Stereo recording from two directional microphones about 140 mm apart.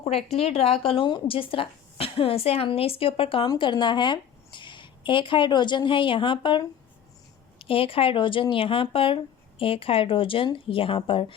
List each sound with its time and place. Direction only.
0.0 s speech: 45° left (ahead or behind)